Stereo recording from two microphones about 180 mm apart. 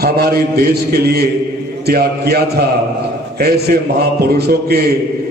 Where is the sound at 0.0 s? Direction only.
60° right (ahead or behind).